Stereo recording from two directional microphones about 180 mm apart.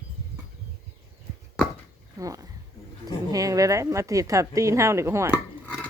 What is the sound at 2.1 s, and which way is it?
A woman's voice, 20° right (ahead or behind).